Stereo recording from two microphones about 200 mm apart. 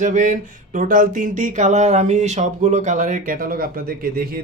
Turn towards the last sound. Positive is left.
turn(degrees=-50)  # may be behind; listen again after turning